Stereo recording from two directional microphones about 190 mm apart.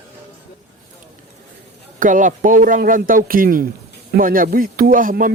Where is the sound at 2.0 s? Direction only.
45° right (ahead or behind).